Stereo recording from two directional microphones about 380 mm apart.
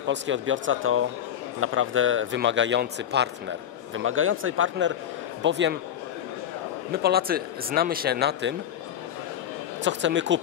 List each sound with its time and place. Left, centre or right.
0.0 s a man's voice: right
6.9 s speech: right
9.8 s speech: right